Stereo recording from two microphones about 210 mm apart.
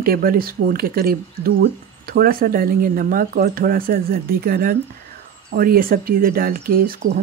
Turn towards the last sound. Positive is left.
turn(degrees=-45)  # may be behind; listen again after turning